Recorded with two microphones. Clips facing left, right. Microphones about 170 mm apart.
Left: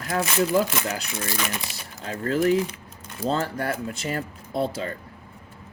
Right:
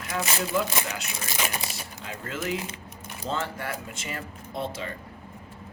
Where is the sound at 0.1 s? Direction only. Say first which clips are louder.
Left 6 dB; 35° left (ahead or behind).